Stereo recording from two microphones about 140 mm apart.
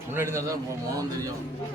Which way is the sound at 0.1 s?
20° right (ahead or behind).